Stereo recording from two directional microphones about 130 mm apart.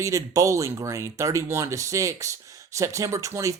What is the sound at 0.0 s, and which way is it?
Speech, 25° right (ahead or behind).